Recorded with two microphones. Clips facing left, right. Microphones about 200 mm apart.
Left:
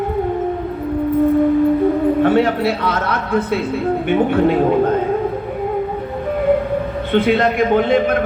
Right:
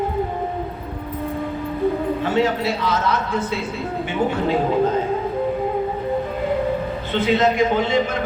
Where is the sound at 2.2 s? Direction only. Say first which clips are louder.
Left 4 dB; 55° left (ahead or behind).